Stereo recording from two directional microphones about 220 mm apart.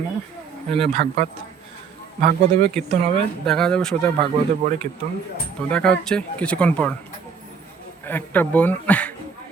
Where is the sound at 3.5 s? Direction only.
5° left (ahead or behind).